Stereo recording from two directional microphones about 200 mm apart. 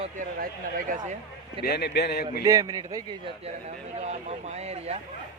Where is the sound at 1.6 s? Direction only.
55° left (ahead or behind).